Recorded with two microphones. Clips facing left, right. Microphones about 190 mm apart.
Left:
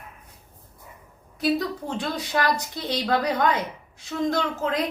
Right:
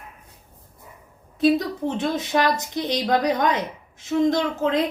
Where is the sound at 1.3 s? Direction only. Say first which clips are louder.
Right 5 dB; 20° right (ahead or behind).